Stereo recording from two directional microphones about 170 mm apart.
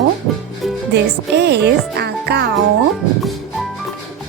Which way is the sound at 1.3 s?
80° right.